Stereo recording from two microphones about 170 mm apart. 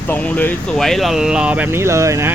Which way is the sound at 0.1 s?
10° left (ahead or behind).